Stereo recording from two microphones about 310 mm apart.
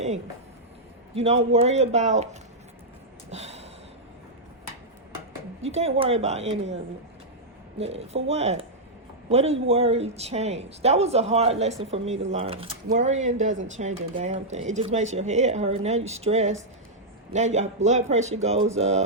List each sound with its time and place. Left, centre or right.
1.1 s a man's voice: centre
3.2 s gasp: right
5.6 s speech: centre
7.8 s speech: centre